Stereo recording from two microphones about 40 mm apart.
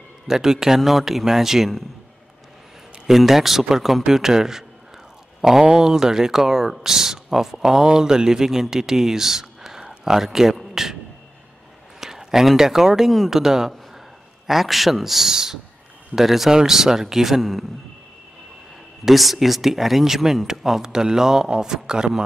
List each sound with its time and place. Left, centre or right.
0.3 s a man's voice: centre
3.1 s a man's voice: centre
12.0 s a man's voice: centre
17.4 s speech: centre
19.0 s a man's voice: centre